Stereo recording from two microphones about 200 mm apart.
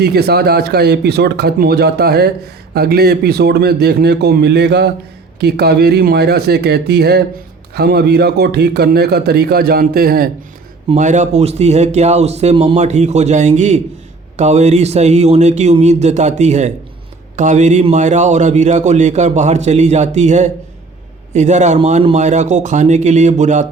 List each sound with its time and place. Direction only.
0.0 s a man's voice: 55° right (ahead or behind)
10.8 s a man's voice: 35° right (ahead or behind)